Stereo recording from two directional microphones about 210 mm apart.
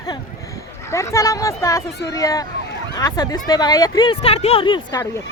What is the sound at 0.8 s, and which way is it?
A woman's voice, 15° left (ahead or behind).